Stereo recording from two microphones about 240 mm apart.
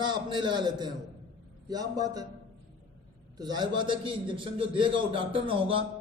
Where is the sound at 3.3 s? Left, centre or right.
Centre.